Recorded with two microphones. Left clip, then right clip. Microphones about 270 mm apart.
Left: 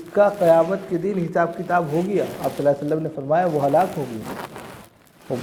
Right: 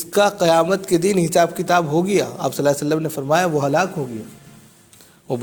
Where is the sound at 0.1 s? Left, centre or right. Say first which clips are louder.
Even; right.